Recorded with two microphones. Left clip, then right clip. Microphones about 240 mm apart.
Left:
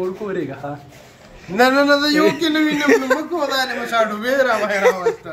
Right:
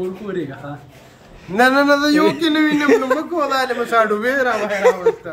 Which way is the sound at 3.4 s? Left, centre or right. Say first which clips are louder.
Right 2 dB; centre.